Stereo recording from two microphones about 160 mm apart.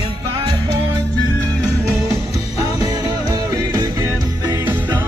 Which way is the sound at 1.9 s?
20° right (ahead or behind).